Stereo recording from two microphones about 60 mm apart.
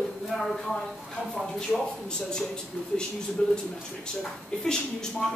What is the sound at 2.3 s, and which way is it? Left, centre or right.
Speech, centre.